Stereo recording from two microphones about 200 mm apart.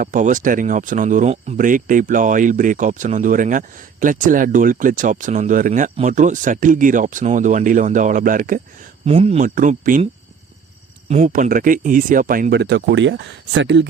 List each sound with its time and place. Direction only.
0.0 s speech: 40° right (ahead or behind)
9.0 s speech: 30° right (ahead or behind)
11.1 s speech: 40° right (ahead or behind); by 13.8 s 65° right (ahead or behind)